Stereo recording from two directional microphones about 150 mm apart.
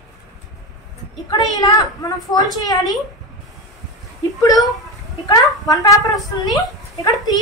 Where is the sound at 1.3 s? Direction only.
25° left (ahead or behind).